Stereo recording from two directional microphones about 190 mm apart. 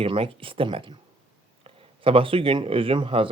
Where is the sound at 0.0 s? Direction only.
30° right (ahead or behind).